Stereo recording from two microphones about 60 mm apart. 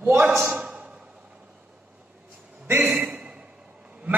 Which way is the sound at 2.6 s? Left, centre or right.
Right.